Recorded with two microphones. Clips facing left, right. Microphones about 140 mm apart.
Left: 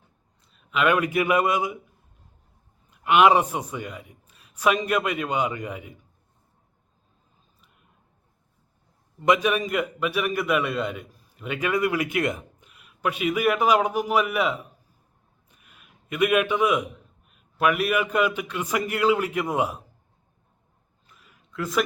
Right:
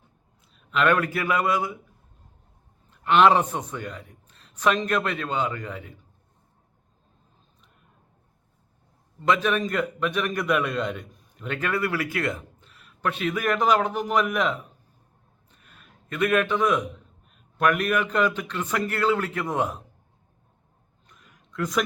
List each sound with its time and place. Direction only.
0.5 s a man's voice: 5° left (ahead or behind)
2.9 s a man's voice: 10° left (ahead or behind)
9.2 s a man's voice: 15° left (ahead or behind)
15.4 s a sound: 10° left (ahead or behind)
17.3 s a man's voice: 5° left (ahead or behind)
21.1 s a sound: 5° left (ahead or behind)